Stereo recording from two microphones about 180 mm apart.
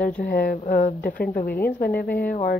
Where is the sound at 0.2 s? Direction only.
60° left (ahead or behind).